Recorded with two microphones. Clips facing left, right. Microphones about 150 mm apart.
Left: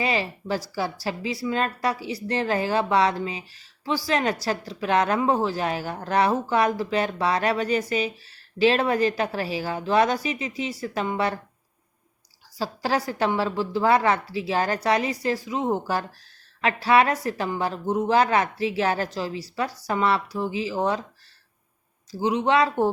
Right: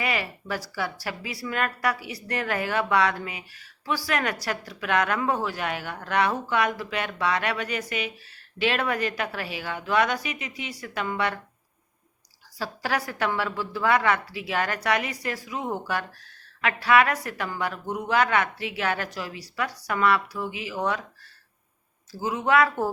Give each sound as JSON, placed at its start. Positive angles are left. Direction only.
{"t": 0.0, "sound": "a woman's voice", "side_deg": 30}
{"t": 12.5, "sound": "a woman's voice", "side_deg": 30}
{"t": 22.2, "sound": "a woman's voice", "side_deg": 20}